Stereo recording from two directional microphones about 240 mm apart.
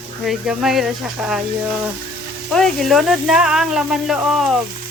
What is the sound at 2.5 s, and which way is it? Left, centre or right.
Speech, centre.